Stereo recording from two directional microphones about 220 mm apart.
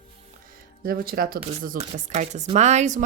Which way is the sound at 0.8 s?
40° right (ahead or behind).